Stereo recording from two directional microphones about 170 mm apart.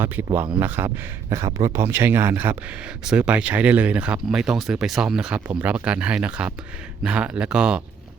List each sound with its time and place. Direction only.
0.6 s speech: 15° right (ahead or behind)